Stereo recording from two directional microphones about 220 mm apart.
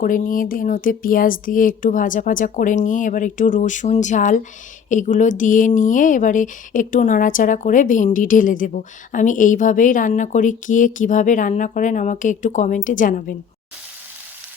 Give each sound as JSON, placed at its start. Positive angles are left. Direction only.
{"t": 0.0, "sound": "speech", "side_deg": 40}